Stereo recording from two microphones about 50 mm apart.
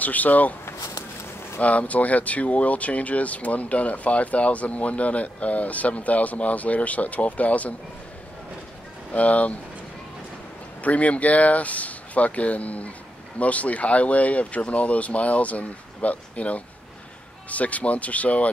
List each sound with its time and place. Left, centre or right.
0.0 s speech: left
0.7 s a sound: left
1.6 s speech: left
9.1 s speech: left
10.8 s speech: left